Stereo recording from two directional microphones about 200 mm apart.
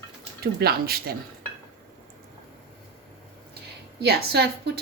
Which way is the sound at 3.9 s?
55° right (ahead or behind).